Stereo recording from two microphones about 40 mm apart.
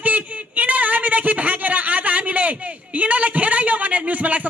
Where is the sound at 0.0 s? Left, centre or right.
Right.